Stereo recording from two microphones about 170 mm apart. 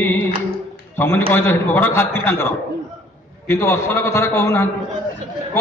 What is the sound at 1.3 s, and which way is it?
Mantra, 10° left (ahead or behind).